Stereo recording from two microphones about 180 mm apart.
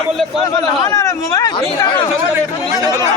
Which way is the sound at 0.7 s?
20° left (ahead or behind).